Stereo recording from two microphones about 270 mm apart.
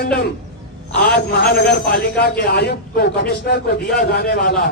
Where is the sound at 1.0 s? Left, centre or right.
Left.